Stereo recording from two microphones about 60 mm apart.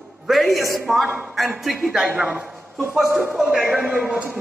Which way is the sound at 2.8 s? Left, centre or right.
Centre.